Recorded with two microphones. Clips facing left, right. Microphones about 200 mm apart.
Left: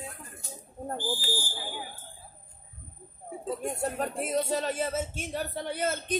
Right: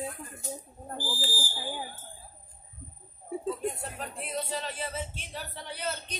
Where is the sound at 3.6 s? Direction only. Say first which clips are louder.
Left 4 dB; 45° left (ahead or behind).